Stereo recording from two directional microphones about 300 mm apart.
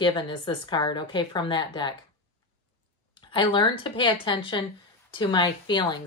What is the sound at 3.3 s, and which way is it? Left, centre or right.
Speech, centre.